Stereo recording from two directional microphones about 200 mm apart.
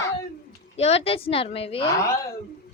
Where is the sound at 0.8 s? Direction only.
30° left (ahead or behind).